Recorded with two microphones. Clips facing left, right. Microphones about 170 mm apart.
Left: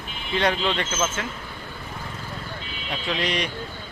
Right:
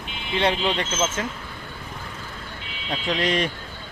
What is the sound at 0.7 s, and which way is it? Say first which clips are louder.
Speech: right 1 dB; 30° right (ahead or behind).